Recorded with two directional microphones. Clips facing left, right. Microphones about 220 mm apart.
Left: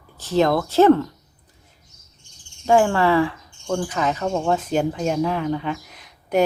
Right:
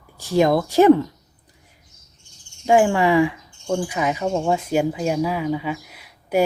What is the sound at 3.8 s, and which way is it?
Speech, 10° right (ahead or behind).